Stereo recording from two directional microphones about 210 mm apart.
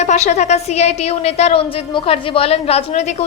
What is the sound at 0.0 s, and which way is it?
A woman's voice, 35° left (ahead or behind).